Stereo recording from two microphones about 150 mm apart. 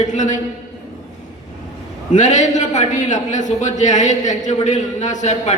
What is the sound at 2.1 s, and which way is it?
A man's voice, 55° left (ahead or behind).